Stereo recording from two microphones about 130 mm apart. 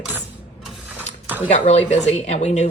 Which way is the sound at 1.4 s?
60° left (ahead or behind).